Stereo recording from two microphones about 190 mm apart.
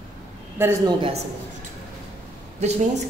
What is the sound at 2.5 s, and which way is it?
Speech, 35° right (ahead or behind).